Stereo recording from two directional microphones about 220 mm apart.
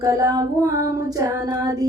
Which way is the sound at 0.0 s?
15° right (ahead or behind).